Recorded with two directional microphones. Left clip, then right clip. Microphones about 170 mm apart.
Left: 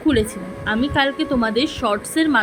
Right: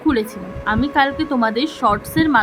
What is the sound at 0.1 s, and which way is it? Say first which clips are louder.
A woman's voice: left 1 dB; 5° left (ahead or behind).